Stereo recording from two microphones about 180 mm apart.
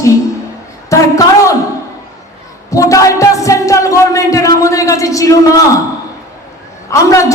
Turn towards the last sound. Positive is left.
turn(degrees=15)  # may be behind; listen again after turning